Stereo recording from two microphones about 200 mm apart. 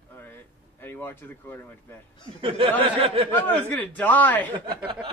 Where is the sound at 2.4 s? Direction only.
25° right (ahead or behind).